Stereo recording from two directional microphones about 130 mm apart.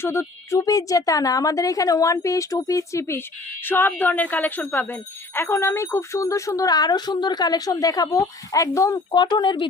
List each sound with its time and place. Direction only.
0.0 s speech: 20° left (ahead or behind); by 9.6 s 35° left (ahead or behind)